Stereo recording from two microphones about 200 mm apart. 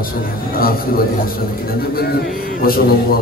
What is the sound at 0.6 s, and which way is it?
Speech, 45° left (ahead or behind).